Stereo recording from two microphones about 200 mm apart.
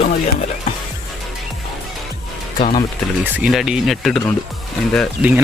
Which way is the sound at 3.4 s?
Centre (ahead or behind).